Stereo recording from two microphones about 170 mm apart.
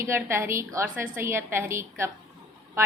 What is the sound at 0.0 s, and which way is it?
A woman's voice, 15° right (ahead or behind).